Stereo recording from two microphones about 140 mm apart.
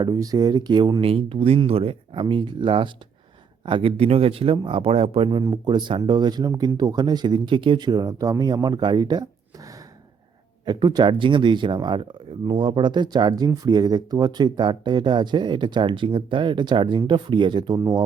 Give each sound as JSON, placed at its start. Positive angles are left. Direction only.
{"t": 0.0, "sound": "speech", "side_deg": -25}
{"t": 5.4, "sound": "speech", "side_deg": -30}
{"t": 10.7, "sound": "speech", "side_deg": -30}